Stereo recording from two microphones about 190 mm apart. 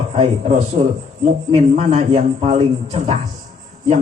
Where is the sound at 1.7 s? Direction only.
40° right (ahead or behind).